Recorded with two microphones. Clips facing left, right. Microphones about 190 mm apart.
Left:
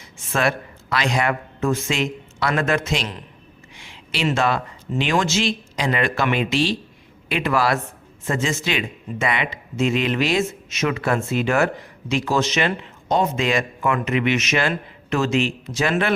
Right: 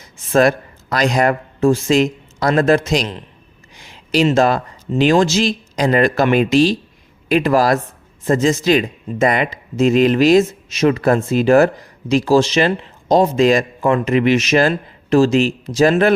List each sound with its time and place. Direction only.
0.0 s speech: 40° right (ahead or behind)
3.8 s a sound: 40° right (ahead or behind)
4.4 s speech: 40° right (ahead or behind)